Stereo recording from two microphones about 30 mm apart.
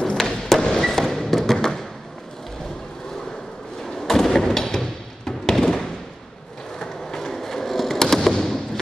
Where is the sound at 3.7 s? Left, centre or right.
Centre.